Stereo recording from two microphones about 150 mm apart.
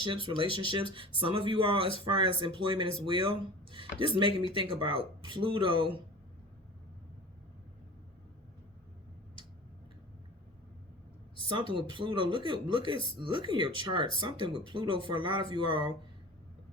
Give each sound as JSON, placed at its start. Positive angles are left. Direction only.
{"t": 0.0, "sound": "speech", "side_deg": -35}
{"t": 11.4, "sound": "speech", "side_deg": -35}